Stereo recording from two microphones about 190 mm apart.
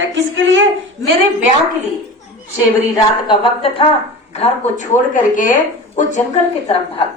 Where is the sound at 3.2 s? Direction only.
25° left (ahead or behind).